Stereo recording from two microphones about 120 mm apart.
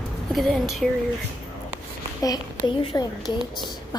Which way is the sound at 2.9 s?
30° left (ahead or behind).